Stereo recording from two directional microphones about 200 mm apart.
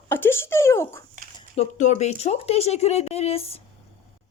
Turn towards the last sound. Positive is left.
turn(degrees=30)  # may be behind; listen again after turning